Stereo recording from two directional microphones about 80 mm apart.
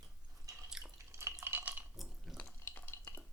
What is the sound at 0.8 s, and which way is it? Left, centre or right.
Drip, centre.